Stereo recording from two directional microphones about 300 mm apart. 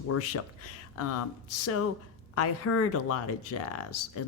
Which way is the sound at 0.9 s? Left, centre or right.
Left.